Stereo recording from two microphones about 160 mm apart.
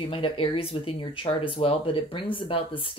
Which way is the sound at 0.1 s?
35° left (ahead or behind).